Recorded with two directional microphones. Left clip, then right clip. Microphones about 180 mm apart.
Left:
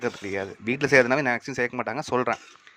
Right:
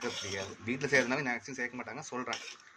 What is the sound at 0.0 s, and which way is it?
Speech, 40° left (ahead or behind).